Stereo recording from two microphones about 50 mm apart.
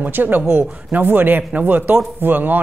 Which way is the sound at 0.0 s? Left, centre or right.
Right.